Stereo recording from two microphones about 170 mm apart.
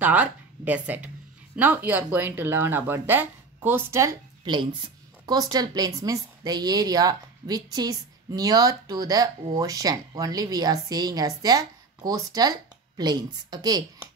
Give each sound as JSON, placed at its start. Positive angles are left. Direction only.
{"t": 0.0, "sound": "a woman's voice", "side_deg": -10}